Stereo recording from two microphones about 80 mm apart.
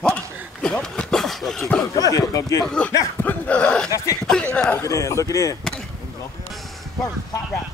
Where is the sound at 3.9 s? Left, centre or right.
Left.